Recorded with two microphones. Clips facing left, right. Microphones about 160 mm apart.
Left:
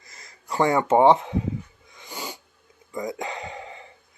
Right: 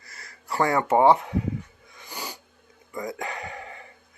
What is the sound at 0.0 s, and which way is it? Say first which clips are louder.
Speech: right 1 dB; 20° left (ahead or behind).